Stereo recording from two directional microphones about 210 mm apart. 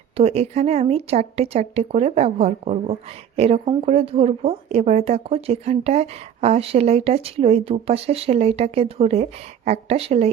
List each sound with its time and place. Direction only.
0.2 s a woman's voice: 30° right (ahead or behind)